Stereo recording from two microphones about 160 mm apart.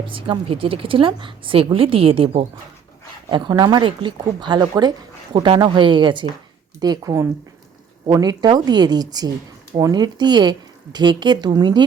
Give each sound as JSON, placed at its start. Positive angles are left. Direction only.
{"t": 0.1, "sound": "a woman's voice", "side_deg": -35}